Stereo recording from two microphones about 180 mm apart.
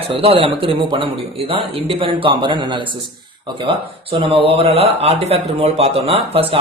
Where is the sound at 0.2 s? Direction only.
30° right (ahead or behind).